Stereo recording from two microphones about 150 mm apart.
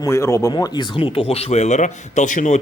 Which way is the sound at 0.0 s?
20° left (ahead or behind).